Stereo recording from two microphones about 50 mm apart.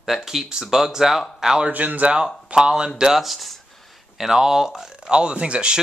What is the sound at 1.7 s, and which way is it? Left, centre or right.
Speech, right.